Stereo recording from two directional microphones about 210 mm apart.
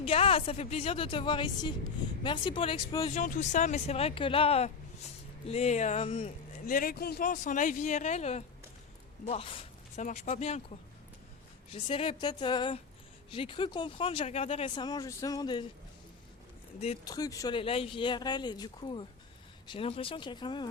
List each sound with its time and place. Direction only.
0.0 s speech: 25° left (ahead or behind)
3.2 s speech: 35° left (ahead or behind)
6.7 s speech: 45° left (ahead or behind)
11.7 s speech: 25° left (ahead or behind)
16.8 s speech: 25° left (ahead or behind)